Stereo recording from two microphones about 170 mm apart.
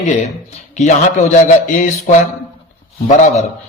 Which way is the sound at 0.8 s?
45° left (ahead or behind).